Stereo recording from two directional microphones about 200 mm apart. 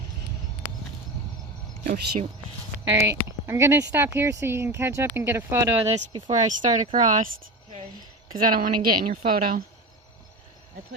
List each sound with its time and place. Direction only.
1.8 s speech: 40° right (ahead or behind)
3.0 s speech: 15° right (ahead or behind)
5.8 s speech: 25° right (ahead or behind)
6.3 s speech: 35° right (ahead or behind)
8.4 s a woman's voice: 45° right (ahead or behind)